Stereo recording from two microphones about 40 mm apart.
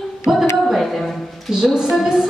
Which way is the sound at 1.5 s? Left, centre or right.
Centre.